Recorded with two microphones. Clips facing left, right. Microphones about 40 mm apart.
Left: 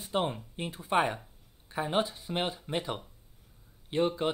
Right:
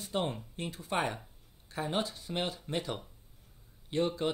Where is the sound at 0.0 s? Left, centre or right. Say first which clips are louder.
Left 3 dB; centre.